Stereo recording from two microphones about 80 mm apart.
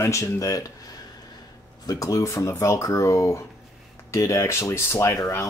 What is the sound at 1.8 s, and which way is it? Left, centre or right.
Speech, left.